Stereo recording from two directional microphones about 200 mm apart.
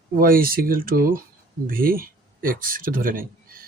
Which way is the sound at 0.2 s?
45° right (ahead or behind).